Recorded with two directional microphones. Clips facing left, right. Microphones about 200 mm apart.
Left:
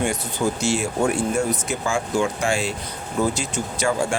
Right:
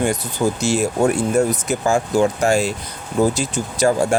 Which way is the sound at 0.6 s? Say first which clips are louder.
Right 5 dB; 40° right (ahead or behind).